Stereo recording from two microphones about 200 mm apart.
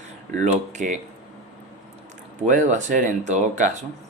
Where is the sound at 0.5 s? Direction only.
35° right (ahead or behind).